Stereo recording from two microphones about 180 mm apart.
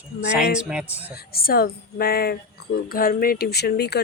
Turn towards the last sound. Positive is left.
turn(degrees=65)  # may be behind; listen again after turning